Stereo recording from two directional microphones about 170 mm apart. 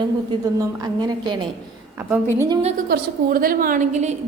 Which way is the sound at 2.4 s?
25° right (ahead or behind).